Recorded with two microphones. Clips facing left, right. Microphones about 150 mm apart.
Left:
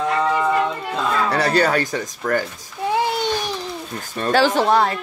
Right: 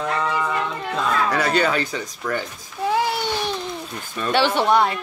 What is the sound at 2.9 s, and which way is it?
Baby cry, 20° left (ahead or behind).